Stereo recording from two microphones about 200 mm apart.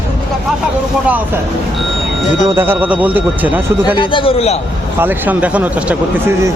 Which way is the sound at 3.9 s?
25° left (ahead or behind).